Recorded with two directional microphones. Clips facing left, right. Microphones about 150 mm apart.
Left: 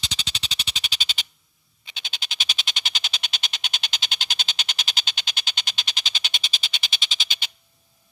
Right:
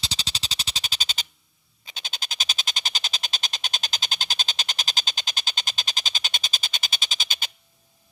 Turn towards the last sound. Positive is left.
turn(degrees=-45)  # may be behind; listen again after turning